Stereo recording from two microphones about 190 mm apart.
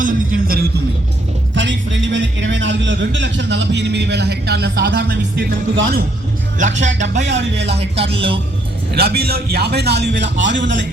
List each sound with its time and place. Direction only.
0.0 s music: 45° right (ahead or behind)
1.5 s a sound: 75° right (ahead or behind)
6.6 s speech: 40° right (ahead or behind)
7.3 s a man's voice: 65° right (ahead or behind)
7.8 s music: 30° right (ahead or behind)
8.9 s a man's voice: 55° right (ahead or behind); by 10.8 s 70° right (ahead or behind)